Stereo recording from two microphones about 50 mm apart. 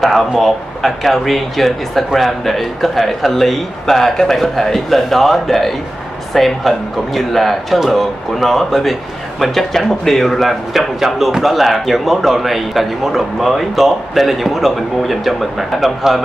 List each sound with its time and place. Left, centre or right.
0.4 s speech: centre